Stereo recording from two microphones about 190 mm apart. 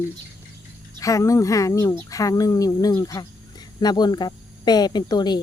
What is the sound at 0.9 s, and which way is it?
Speech, 15° left (ahead or behind).